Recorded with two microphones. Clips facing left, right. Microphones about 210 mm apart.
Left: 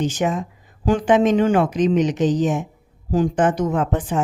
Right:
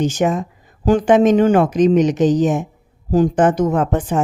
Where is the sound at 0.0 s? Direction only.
45° right (ahead or behind).